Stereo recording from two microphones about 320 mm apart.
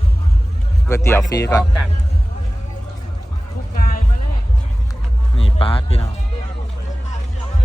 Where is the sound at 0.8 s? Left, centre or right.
Centre.